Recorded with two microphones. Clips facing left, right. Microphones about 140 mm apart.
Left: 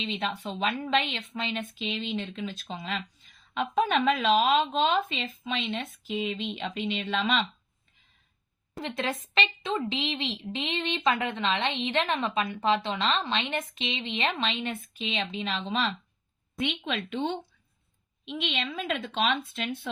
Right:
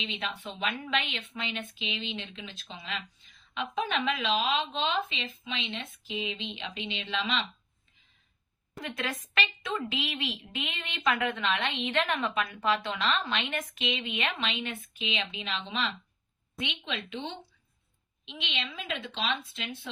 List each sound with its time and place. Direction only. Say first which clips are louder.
0.0 s a woman's voice: left 5 dB; 40° left (ahead or behind)
8.8 s a woman's voice: left 4 dB; 25° left (ahead or behind); by 19.9 s 50° left (ahead or behind)